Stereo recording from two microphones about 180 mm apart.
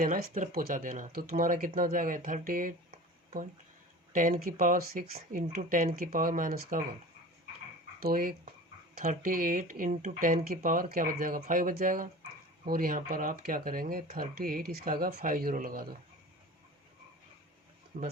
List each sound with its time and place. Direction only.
0.0 s speech: 50° right (ahead or behind)
4.1 s speech: 45° right (ahead or behind)
8.0 s speech: 55° right (ahead or behind)
17.9 s speech: 55° right (ahead or behind)